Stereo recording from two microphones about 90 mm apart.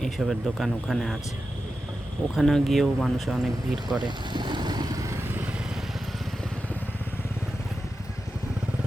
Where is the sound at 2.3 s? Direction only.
5° left (ahead or behind).